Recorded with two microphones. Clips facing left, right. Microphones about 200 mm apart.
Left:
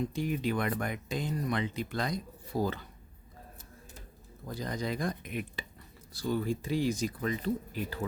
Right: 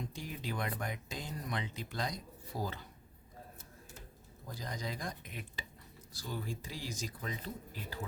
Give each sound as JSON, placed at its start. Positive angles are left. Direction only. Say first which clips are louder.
{"t": 0.1, "sound": "speech", "louder": "left 11 dB", "side_deg": 60}
{"t": 4.5, "sound": "speech", "louder": "left 8 dB", "side_deg": 65}